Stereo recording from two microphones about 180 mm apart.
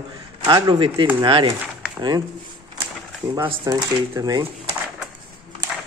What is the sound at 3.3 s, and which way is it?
Speech, 25° right (ahead or behind).